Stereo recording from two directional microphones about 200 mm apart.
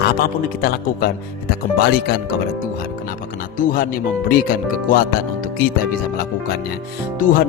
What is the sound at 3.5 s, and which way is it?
Speech, 45° left (ahead or behind).